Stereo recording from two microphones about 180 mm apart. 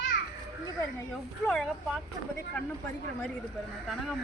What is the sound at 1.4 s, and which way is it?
Speech, 5° left (ahead or behind).